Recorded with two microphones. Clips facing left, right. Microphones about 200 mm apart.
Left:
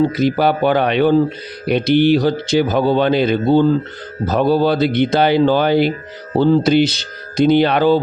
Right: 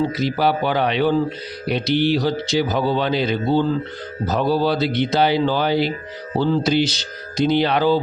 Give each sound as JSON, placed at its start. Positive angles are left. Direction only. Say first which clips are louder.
{"t": 0.1, "sound": "speech", "louder": "left 4 dB", "side_deg": 55}